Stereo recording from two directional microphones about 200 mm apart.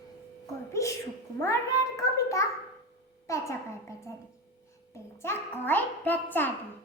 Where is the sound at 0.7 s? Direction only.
15° left (ahead or behind).